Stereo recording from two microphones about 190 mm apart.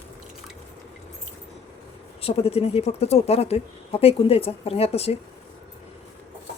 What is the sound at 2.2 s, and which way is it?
Speech, 30° left (ahead or behind).